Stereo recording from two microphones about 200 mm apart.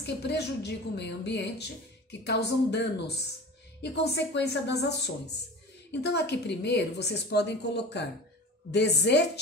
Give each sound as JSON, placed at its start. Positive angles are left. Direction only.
{"t": 0.0, "sound": "a woman's voice", "side_deg": 55}